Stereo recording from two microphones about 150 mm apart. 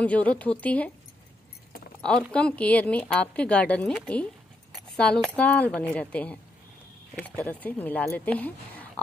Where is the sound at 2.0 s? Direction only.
5° left (ahead or behind).